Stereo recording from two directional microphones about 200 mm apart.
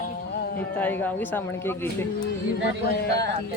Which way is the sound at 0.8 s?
10° left (ahead or behind).